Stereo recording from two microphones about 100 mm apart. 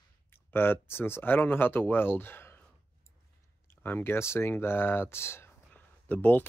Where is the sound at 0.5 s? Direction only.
20° left (ahead or behind).